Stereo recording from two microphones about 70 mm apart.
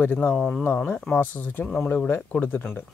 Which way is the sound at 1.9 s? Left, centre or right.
Left.